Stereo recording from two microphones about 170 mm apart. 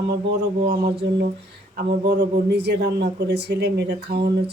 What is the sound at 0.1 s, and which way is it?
Speech, 80° right.